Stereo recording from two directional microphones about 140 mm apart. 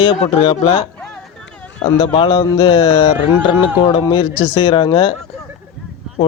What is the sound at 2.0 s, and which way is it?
Speech, 35° left (ahead or behind).